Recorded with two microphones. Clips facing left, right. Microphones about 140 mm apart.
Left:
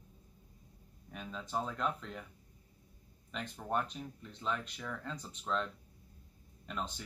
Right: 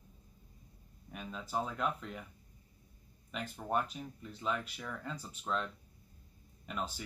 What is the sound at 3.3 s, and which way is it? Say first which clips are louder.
Speech: right 1 dB; 5° right (ahead or behind).